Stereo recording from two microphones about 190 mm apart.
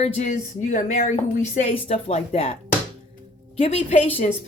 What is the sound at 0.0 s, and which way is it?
Speech, 40° left (ahead or behind).